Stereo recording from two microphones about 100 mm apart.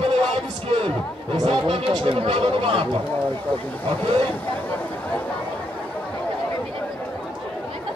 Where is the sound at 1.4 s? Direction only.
60° right (ahead or behind).